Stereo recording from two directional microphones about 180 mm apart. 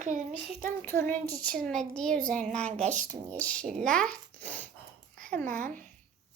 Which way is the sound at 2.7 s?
40° right (ahead or behind).